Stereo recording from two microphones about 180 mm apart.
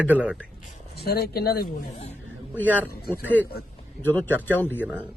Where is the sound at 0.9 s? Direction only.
60° left (ahead or behind).